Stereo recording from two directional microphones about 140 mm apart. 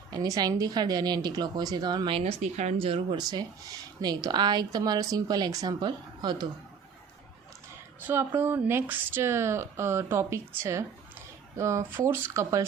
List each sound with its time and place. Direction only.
0.1 s speech: 30° right (ahead or behind)
2.4 s speech: 55° right (ahead or behind); by 6.5 s 30° right (ahead or behind)
8.0 s speech: 15° right (ahead or behind)